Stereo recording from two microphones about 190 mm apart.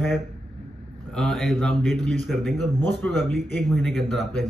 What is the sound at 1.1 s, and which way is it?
Speech, centre (ahead or behind).